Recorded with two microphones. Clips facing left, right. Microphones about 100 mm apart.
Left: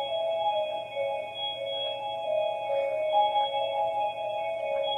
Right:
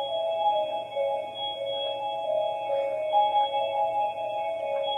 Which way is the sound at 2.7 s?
5° right (ahead or behind).